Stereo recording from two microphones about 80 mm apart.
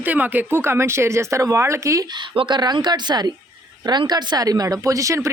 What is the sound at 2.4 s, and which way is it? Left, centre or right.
A woman's voice, right.